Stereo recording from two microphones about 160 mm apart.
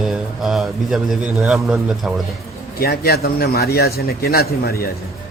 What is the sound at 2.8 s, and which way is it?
A man's voice, 75° left (ahead or behind).